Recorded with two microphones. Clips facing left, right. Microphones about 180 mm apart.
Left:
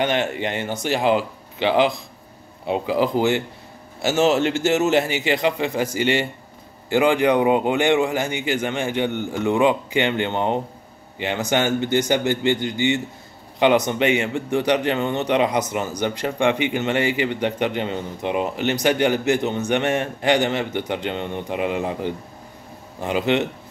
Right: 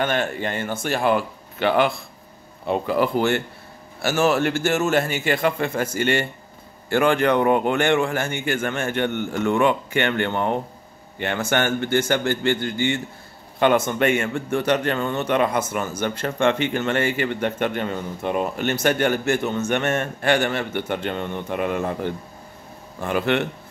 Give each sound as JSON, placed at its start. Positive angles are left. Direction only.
{"t": 0.0, "sound": "a man's voice", "side_deg": 20}